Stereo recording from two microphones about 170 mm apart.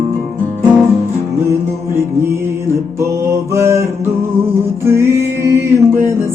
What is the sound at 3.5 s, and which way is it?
Music, 15° right (ahead or behind).